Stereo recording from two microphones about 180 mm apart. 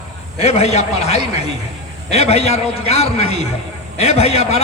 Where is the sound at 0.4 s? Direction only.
35° left (ahead or behind).